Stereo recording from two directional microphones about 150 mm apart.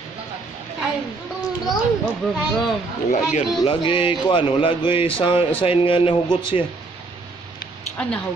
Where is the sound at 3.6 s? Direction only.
35° left (ahead or behind).